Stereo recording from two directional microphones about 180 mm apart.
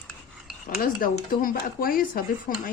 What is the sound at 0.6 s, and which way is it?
Speech, 50° left (ahead or behind).